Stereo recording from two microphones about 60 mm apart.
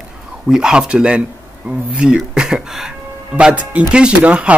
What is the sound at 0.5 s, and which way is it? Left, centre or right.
Speech, centre.